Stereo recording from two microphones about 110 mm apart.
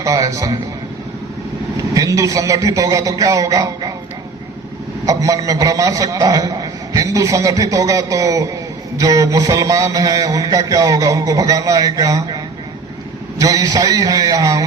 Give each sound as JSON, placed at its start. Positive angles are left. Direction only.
{"t": 0.0, "sound": "a man's voice", "side_deg": -30}
{"t": 1.9, "sound": "a man's voice", "side_deg": -30}
{"t": 5.0, "sound": "a man's voice", "side_deg": -30}
{"t": 13.4, "sound": "a man's voice", "side_deg": -30}